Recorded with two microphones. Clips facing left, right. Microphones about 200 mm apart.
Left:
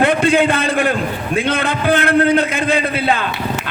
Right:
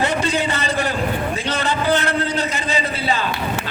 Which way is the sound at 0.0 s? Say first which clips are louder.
Left 7 dB; 55° left (ahead or behind).